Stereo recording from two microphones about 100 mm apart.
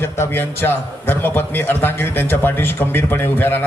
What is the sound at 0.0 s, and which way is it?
A man's voice, 20° left (ahead or behind).